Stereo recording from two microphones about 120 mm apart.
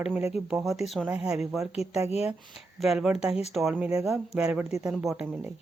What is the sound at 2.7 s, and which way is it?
Speech, 5° right (ahead or behind).